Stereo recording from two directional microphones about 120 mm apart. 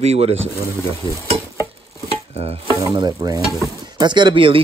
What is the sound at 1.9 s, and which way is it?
Stir, 55° right (ahead or behind).